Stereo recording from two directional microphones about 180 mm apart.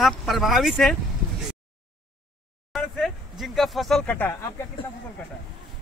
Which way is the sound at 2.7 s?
Centre (ahead or behind).